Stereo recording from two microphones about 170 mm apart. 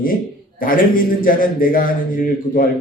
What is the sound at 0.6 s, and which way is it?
A man's voice, 55° left (ahead or behind).